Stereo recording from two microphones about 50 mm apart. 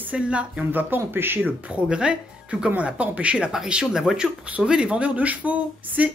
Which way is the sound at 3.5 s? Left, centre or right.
Centre.